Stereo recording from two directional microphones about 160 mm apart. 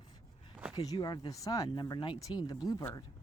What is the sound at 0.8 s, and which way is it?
Speech, 25° left (ahead or behind).